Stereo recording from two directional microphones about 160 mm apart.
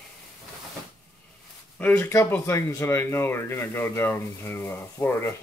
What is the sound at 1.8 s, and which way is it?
Speech, 10° left (ahead or behind).